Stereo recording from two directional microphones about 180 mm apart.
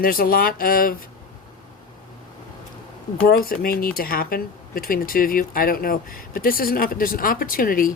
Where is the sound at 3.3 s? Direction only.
55° left (ahead or behind).